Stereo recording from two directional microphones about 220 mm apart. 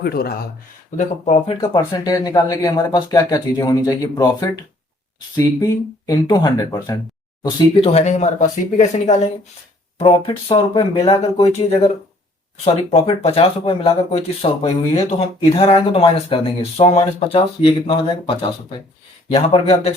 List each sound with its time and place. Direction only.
0.0 s speech: 45° left (ahead or behind)
0.9 s speech: 30° left (ahead or behind)
1.6 s speech: 15° left (ahead or behind)
7.4 s speech: 25° left (ahead or behind)